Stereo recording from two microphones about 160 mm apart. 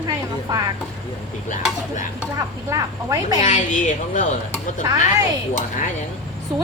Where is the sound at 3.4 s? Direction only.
50° left (ahead or behind).